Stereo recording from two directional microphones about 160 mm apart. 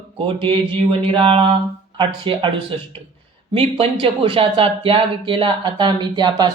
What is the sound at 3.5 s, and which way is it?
Speech, 35° right (ahead or behind).